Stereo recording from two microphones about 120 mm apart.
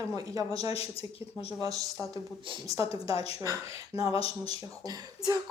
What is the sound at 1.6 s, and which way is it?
Speech, 30° right (ahead or behind).